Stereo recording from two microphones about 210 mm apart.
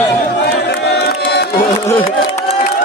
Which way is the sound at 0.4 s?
50° left (ahead or behind).